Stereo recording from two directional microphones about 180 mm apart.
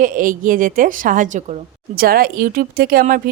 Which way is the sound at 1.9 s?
55° right (ahead or behind).